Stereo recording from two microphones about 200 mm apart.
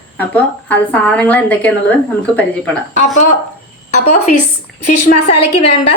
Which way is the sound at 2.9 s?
35° left (ahead or behind).